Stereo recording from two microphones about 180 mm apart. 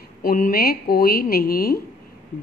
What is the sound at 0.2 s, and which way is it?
A woman's voice, 55° left (ahead or behind).